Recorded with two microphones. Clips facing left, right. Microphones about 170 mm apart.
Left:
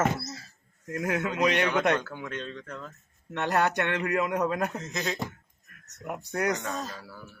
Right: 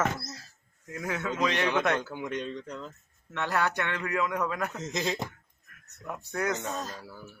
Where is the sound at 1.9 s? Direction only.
20° right (ahead or behind).